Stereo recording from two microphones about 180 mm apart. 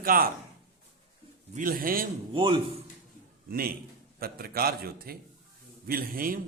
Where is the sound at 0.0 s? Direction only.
50° right (ahead or behind).